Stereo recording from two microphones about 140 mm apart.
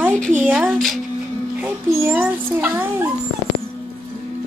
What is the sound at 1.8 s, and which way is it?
Speech, 20° right (ahead or behind).